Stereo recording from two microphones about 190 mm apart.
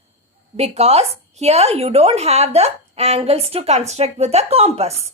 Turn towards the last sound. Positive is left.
turn(degrees=-30)  # may be behind; listen again after turning